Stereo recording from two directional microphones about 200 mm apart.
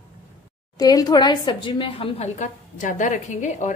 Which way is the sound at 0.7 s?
20° left (ahead or behind).